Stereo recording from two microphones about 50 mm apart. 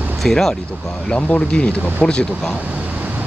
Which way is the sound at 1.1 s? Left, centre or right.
Left.